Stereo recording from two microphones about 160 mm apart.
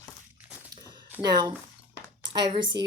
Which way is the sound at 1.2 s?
25° right (ahead or behind).